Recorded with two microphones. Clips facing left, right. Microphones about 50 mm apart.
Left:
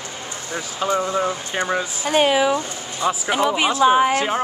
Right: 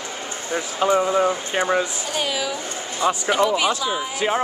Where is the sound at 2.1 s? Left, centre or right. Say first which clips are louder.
Left 8 dB; left.